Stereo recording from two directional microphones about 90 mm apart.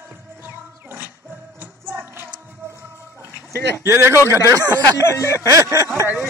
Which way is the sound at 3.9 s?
30° right (ahead or behind).